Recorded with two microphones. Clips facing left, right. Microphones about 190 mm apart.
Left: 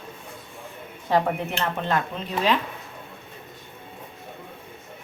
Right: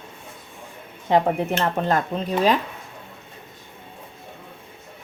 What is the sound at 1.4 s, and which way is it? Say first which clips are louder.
Speech: right 5 dB; 35° right (ahead or behind).